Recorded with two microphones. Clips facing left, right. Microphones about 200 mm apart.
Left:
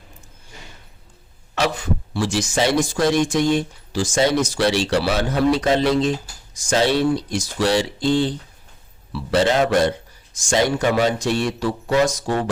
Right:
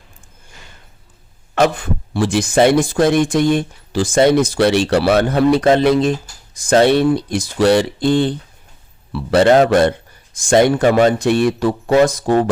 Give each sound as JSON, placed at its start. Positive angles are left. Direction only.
{"t": 1.5, "sound": "speech", "side_deg": -55}